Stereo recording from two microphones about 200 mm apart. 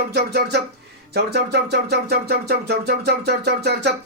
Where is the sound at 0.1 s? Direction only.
55° right (ahead or behind).